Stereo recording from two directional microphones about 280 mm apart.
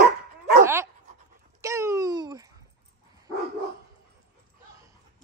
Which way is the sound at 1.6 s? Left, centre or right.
Centre.